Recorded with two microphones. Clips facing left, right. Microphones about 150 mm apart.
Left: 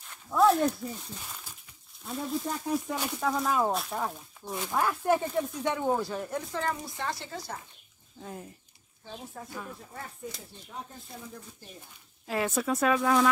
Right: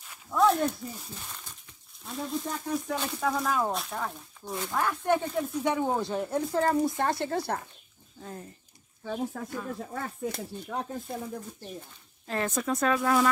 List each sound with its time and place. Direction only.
0.0 s a sound: centre (ahead or behind)
2.0 s speech: centre (ahead or behind)
5.9 s speech: 25° right (ahead or behind)
6.5 s speech: 40° right (ahead or behind)
7.0 s speech: 55° right (ahead or behind)
8.2 s speech: 5° left (ahead or behind)
9.1 s speech: 90° right
9.8 s speech: 70° right (ahead or behind)
12.3 s speech: 5° left (ahead or behind)